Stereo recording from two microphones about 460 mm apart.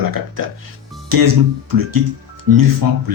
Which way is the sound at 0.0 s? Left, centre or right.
Right.